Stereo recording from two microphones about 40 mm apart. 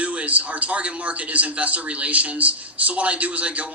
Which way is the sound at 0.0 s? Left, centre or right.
Right.